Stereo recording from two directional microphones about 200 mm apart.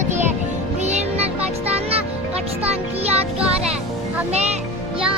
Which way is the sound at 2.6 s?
30° right (ahead or behind).